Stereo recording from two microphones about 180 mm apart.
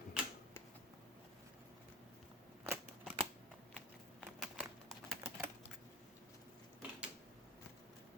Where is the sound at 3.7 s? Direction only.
Centre (ahead or behind).